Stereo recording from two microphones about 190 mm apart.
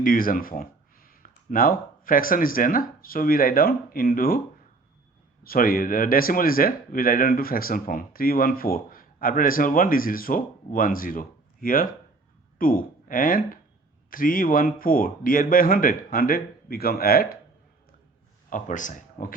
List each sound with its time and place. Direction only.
0.0 s speech: 50° left (ahead or behind)
5.4 s speech: 50° left (ahead or behind)
18.5 s speech: 45° left (ahead or behind)